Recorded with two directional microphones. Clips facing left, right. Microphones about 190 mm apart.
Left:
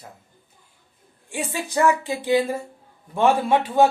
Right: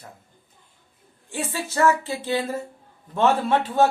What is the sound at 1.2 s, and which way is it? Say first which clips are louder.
Speech: left 1 dB; 15° left (ahead or behind).